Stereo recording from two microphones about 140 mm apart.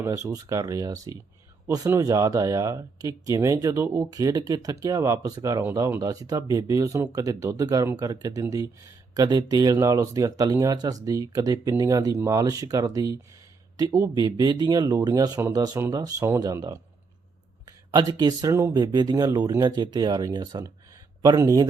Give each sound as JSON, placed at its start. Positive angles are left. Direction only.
{"t": 0.0, "sound": "speech", "side_deg": -20}
{"t": 17.9, "sound": "speech", "side_deg": -30}